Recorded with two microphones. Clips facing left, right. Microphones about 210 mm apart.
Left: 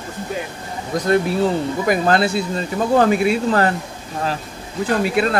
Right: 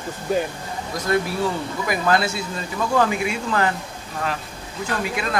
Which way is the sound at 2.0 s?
30° left (ahead or behind).